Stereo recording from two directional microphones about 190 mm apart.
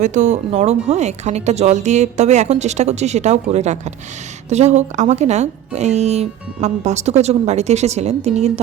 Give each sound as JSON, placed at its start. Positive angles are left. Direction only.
{"t": 0.0, "sound": "speech", "side_deg": -40}